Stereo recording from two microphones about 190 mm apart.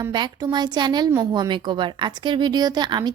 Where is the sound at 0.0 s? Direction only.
20° right (ahead or behind).